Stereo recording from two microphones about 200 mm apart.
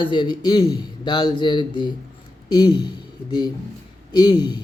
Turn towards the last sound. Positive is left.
turn(degrees=20)  # may be behind; listen again after turning